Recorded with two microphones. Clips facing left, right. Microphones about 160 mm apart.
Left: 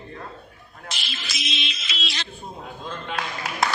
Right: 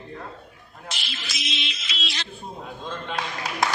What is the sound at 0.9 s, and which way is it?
Music, 90° left.